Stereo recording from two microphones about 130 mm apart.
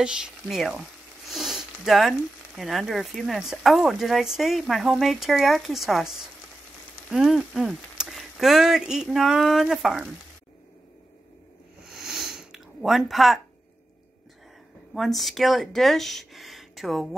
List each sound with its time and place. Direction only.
0.0 s speech: 5° right (ahead or behind)
11.8 s sniff: 5° right (ahead or behind)
15.0 s speech: centre (ahead or behind)